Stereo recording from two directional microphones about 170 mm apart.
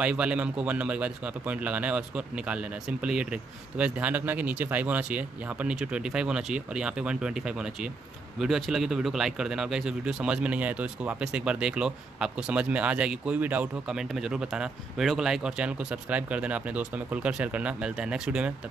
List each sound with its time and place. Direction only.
0.0 s a man's voice: 5° right (ahead or behind)